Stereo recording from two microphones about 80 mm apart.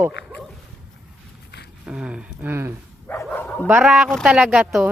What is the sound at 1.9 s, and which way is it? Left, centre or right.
Speech, centre.